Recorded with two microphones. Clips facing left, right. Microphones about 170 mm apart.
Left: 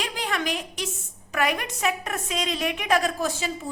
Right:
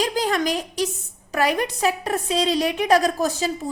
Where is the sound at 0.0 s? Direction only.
40° right (ahead or behind).